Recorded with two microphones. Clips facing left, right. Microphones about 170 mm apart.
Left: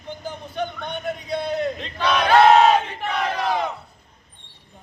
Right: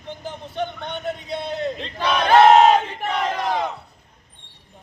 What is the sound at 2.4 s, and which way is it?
Battle cry, 25° right (ahead or behind).